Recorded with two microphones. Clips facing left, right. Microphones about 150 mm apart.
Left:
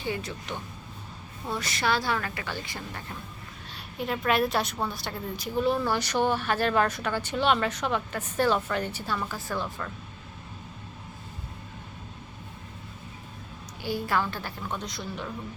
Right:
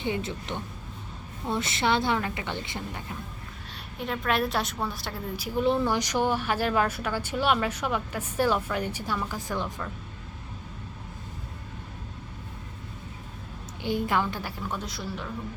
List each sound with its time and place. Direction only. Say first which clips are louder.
0.0 s a woman's voice: right 2 dB; 25° right (ahead or behind)
3.9 s a woman's voice: left 2 dB; 5° left (ahead or behind)
5.5 s a woman's voice: right 1 dB; 20° right (ahead or behind)
13.8 s a woman's voice: right 2 dB; 20° right (ahead or behind); by 15.3 s 5° right (ahead or behind)